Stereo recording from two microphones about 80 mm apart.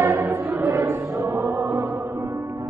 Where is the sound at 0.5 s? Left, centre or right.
Right.